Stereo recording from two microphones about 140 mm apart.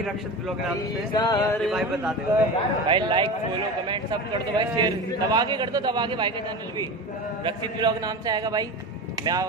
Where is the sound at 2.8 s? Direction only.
35° right (ahead or behind).